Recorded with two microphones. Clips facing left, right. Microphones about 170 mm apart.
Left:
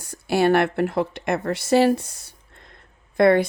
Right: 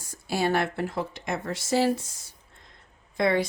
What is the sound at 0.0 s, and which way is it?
A woman's voice, 65° left (ahead or behind).